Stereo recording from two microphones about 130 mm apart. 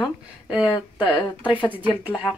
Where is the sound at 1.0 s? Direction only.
40° left (ahead or behind).